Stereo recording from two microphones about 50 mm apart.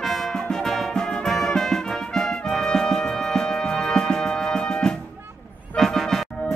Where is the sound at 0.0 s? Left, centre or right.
Centre.